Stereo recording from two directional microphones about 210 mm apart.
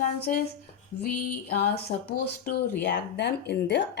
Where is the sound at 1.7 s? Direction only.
50° left (ahead or behind).